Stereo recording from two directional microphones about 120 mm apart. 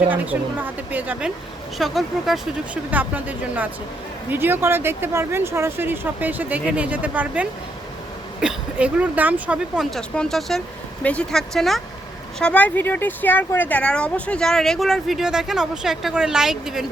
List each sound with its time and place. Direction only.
0.1 s speech: 15° right (ahead or behind)
1.8 s speech: centre (ahead or behind)
2.9 s speech: 15° right (ahead or behind)